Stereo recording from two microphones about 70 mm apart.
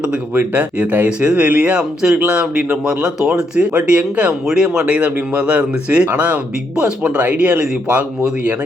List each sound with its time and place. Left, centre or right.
0.0 s a man's voice: right